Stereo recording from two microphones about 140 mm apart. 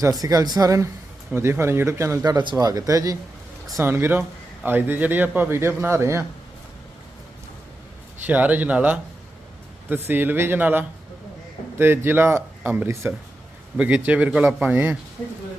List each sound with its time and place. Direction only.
0.2 s a man's voice: 25° right (ahead or behind)
8.3 s a man's voice: 10° right (ahead or behind)